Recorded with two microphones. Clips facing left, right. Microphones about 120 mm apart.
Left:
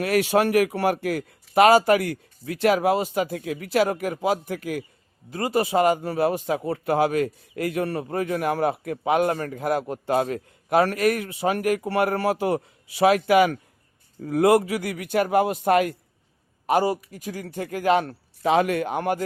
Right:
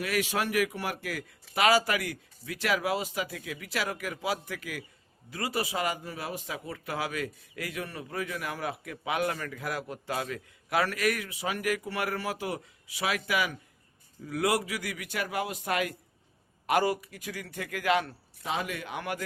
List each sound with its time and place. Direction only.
0.0 s a man's voice: 55° left (ahead or behind)
16.6 s a man's voice: 35° left (ahead or behind)
18.1 s a man's voice: 65° left (ahead or behind); by 19.2 s 45° left (ahead or behind)